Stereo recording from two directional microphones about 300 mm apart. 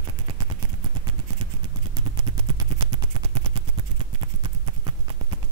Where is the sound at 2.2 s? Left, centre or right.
Centre.